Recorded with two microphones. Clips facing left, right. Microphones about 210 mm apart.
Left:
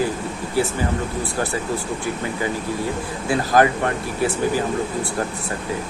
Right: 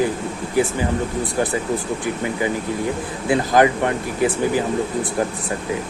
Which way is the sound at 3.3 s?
20° right (ahead or behind).